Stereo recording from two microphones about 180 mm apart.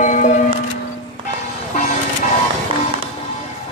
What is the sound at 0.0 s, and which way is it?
Music, 45° left (ahead or behind).